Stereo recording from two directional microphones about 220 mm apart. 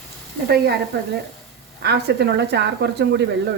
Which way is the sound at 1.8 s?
50° right (ahead or behind).